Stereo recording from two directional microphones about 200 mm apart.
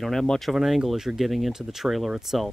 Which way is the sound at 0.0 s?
Centre (ahead or behind).